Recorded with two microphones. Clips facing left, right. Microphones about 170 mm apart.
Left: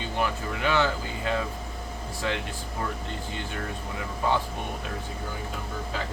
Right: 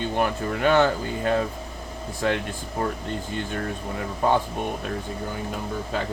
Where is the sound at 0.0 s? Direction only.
50° right (ahead or behind).